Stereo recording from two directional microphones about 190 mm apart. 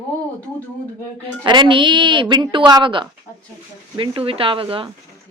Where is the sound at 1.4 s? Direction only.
25° right (ahead or behind).